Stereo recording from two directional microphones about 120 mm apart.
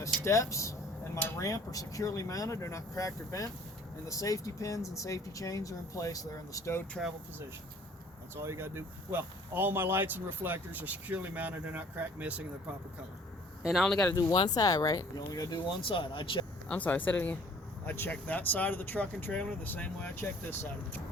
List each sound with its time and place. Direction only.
0.3 s speech: 25° left (ahead or behind)
8.4 s speech: 20° right (ahead or behind)
13.6 s speech: 5° right (ahead or behind)
13.8 s speech: 10° left (ahead or behind)
14.1 s speech: 30° left (ahead or behind); by 16.5 s 45° left (ahead or behind)
16.6 s speech: 10° left (ahead or behind)